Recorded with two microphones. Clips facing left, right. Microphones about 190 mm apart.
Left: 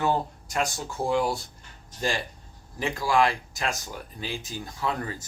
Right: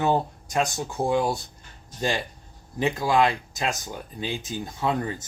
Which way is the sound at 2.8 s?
20° right (ahead or behind).